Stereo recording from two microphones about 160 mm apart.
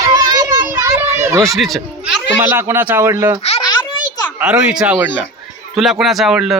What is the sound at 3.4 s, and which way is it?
Babbling, 40° left (ahead or behind).